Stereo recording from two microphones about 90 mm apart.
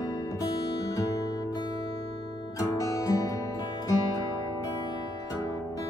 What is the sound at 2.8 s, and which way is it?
Music, 40° left (ahead or behind).